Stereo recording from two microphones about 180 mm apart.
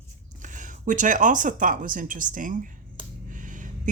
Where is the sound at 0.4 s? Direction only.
45° right (ahead or behind).